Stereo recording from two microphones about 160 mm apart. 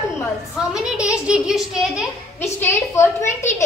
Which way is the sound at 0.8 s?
5° right (ahead or behind).